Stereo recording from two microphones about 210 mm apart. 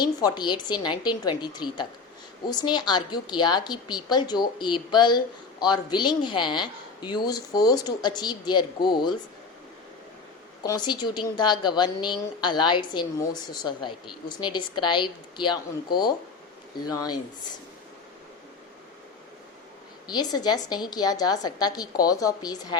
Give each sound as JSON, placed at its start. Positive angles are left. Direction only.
{"t": 0.0, "sound": "a woman's voice", "side_deg": 20}
{"t": 10.6, "sound": "a woman's voice", "side_deg": 20}
{"t": 20.1, "sound": "a woman's voice", "side_deg": 20}